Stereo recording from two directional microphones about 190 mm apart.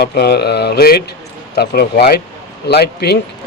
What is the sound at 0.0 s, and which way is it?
Speech, 55° left (ahead or behind).